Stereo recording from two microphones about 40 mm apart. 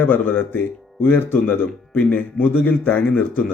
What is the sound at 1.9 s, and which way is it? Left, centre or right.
Speech, left.